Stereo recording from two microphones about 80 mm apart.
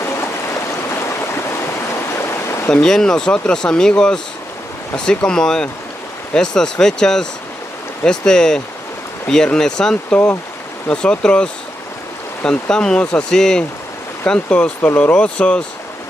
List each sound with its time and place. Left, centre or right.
0.0 s stream: left
2.7 s speech: centre
12.4 s speech: centre